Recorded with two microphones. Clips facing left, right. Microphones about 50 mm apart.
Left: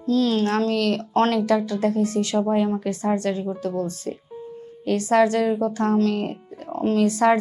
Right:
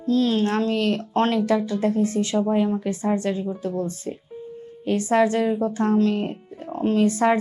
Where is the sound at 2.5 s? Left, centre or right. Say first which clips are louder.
Even; centre.